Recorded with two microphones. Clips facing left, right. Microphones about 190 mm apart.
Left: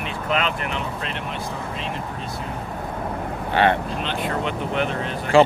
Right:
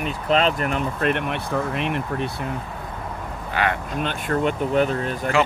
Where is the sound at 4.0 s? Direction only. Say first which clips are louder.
Right 2 dB; 50° right (ahead or behind).